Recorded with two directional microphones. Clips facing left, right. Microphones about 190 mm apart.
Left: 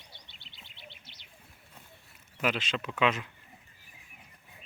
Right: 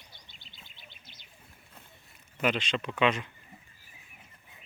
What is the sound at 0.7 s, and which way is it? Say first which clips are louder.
Bird: left 3 dB; 70° left (ahead or behind).